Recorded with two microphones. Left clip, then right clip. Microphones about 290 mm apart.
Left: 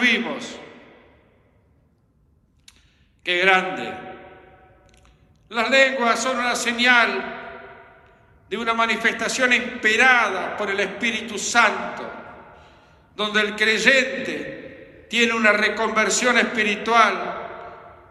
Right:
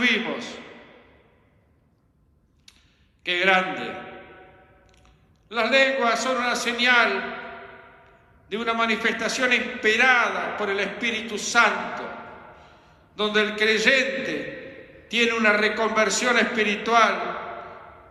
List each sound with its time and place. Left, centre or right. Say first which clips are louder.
0.0 s a man's voice: left 2 dB; left
3.2 s a man's voice: left 2 dB; left
5.5 s a man's voice: left 2 dB; left